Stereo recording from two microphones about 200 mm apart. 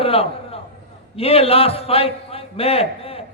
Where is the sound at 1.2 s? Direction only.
30° left (ahead or behind).